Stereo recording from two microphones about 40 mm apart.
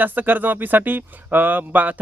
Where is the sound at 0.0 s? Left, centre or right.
Right.